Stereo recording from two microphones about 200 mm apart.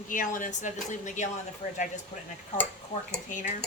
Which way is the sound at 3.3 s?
40° left (ahead or behind).